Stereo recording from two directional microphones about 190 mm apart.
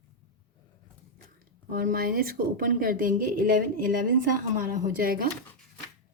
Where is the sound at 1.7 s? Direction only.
50° right (ahead or behind).